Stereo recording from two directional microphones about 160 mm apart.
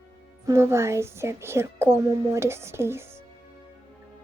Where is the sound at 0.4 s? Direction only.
15° right (ahead or behind).